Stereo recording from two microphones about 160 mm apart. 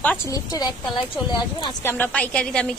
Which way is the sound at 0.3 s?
25° left (ahead or behind).